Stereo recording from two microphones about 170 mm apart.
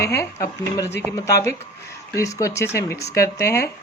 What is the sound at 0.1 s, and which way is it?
Speech, 15° left (ahead or behind).